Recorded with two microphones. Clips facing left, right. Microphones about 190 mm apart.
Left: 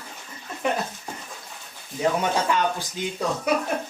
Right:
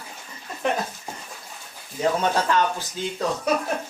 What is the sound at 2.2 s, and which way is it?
Speech, 10° left (ahead or behind).